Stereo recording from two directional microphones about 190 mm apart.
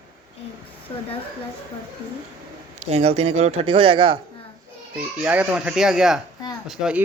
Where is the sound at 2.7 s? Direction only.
35° right (ahead or behind).